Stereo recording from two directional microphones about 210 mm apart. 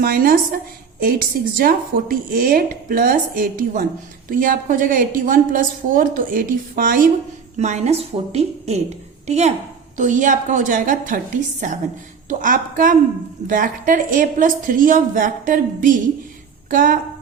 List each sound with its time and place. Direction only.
0.0 s a woman's voice: 45° right (ahead or behind)